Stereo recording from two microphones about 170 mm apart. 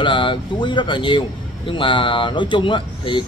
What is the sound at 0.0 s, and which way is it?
Speech, 30° left (ahead or behind).